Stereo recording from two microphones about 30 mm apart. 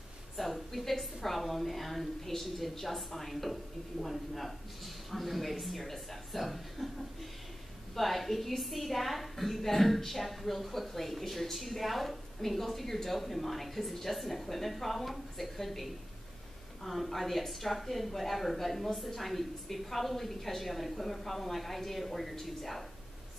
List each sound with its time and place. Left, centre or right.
0.4 s a woman's voice: centre
7.9 s a woman's voice: centre